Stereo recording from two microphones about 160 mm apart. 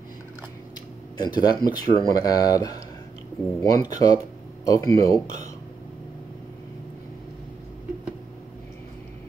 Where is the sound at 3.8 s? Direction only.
20° left (ahead or behind).